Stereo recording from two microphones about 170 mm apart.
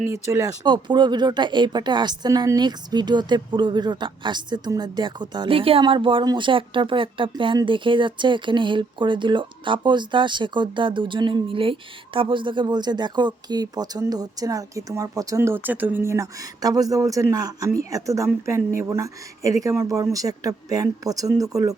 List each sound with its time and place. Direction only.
0.0 s speech: 15° right (ahead or behind)